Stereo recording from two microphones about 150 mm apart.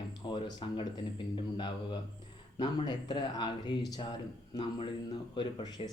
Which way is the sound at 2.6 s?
30° left (ahead or behind).